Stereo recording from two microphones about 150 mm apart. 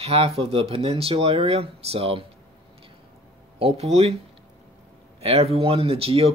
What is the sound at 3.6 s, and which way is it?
Speech, 40° right (ahead or behind).